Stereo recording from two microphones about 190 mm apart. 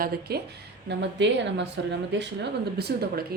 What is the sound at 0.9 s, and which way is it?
A woman's voice, 65° right (ahead or behind).